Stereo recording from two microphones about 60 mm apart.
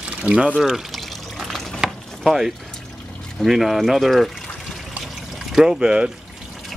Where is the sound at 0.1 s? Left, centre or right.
Right.